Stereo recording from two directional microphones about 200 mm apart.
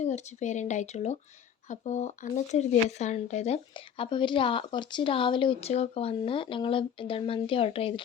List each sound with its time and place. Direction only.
0.0 s speech: 35° left (ahead or behind)